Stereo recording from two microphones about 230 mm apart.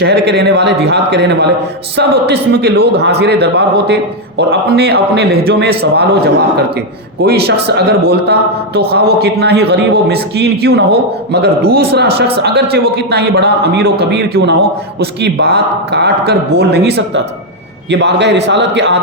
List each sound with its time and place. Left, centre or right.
0.0 s a man's voice: right
7.3 s a man's voice: right